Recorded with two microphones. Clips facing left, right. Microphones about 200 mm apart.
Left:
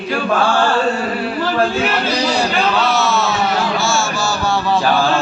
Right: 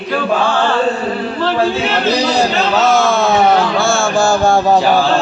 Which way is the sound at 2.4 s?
45° right (ahead or behind).